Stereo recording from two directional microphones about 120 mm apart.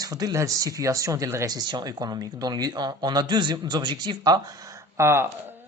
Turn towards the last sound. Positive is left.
turn(degrees=-20)  # may be behind; listen again after turning